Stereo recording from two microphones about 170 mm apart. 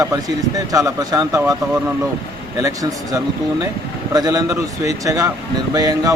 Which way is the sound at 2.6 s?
20° right (ahead or behind).